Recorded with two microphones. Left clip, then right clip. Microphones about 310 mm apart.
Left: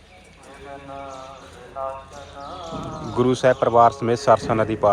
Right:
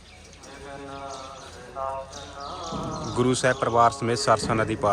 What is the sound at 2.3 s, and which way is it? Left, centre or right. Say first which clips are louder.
Horse: left 1 dB; left.